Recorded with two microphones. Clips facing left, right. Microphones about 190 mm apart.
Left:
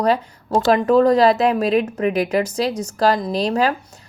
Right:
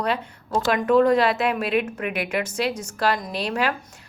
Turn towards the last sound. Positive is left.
turn(degrees=35)  # may be behind; listen again after turning